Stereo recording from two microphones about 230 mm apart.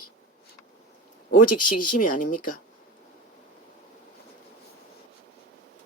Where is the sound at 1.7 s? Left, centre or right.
Left.